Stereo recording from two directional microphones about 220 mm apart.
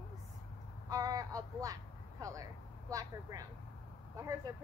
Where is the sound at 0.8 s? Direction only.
15° right (ahead or behind).